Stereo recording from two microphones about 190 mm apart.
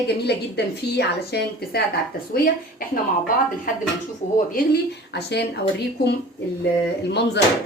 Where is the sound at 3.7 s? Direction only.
45° left (ahead or behind).